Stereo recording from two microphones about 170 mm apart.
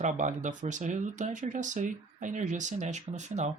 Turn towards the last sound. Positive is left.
turn(degrees=-45)  # may be behind; listen again after turning